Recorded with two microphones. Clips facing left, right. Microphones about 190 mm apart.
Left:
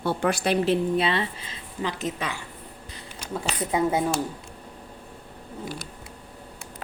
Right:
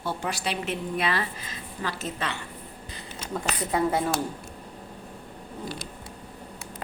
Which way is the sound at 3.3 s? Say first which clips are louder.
Even; 5° left (ahead or behind).